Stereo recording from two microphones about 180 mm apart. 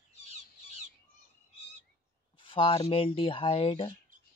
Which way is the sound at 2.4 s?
30° left (ahead or behind).